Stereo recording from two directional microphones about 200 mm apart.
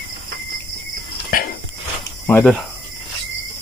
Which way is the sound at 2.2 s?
10° left (ahead or behind).